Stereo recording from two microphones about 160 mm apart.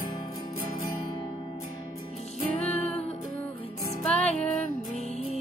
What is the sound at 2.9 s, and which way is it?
Music, 40° left (ahead or behind).